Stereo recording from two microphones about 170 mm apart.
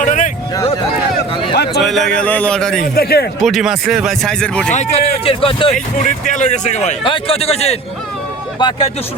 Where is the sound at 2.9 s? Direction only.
65° left (ahead or behind).